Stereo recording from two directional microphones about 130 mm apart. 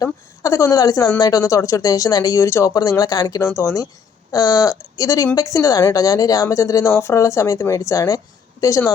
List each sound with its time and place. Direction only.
0.0 s speech: 25° left (ahead or behind)